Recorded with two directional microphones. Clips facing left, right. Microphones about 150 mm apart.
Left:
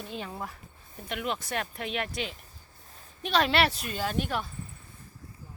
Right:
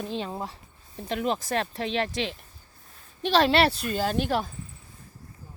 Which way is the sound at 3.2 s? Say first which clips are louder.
Right 4 dB; 30° right (ahead or behind).